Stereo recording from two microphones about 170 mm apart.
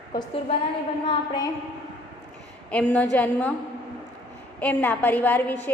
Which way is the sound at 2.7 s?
10° left (ahead or behind).